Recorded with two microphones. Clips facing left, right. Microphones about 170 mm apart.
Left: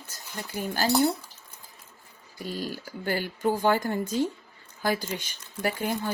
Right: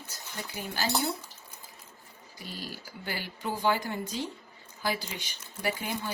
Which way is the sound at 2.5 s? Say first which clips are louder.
Left 7 dB; 45° left (ahead or behind).